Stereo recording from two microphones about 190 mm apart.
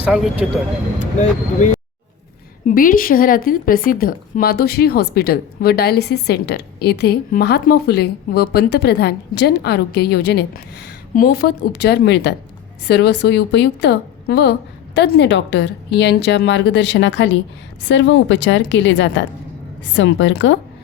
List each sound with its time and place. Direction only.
0.0 s speech: 5° right (ahead or behind)
0.9 s a woman's voice: 40° left (ahead or behind); by 20.6 s 75° left (ahead or behind)